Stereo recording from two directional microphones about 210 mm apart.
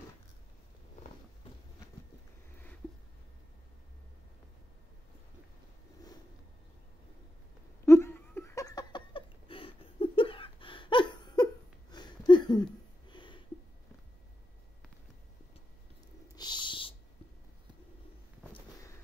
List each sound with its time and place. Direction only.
7.8 s laughter: 15° left (ahead or behind)
11.9 s a sound: 20° left (ahead or behind)
16.3 s owl: 20° left (ahead or behind)